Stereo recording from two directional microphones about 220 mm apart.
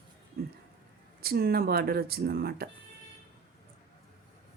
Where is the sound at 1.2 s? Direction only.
45° right (ahead or behind).